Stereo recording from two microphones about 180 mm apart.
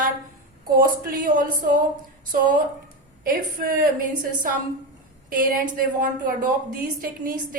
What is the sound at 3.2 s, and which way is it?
Speech, 55° right (ahead or behind).